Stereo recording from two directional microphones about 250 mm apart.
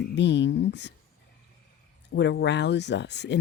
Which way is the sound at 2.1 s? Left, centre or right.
Left.